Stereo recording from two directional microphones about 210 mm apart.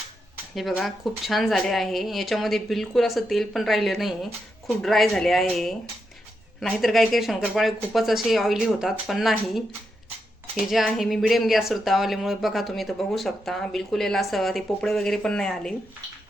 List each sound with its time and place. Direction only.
0.5 s speech: centre (ahead or behind)